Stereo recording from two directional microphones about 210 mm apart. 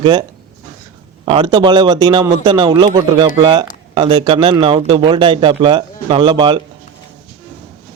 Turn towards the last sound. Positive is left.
turn(degrees=-20)  # may be behind; listen again after turning